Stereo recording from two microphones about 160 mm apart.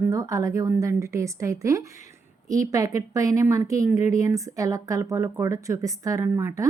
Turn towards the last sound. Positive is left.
turn(degrees=-20)  # may be behind; listen again after turning